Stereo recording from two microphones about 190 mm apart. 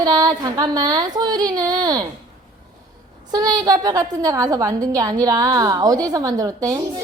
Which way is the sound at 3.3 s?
20° right (ahead or behind).